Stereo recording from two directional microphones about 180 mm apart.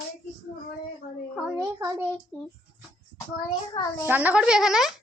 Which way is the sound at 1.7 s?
20° right (ahead or behind).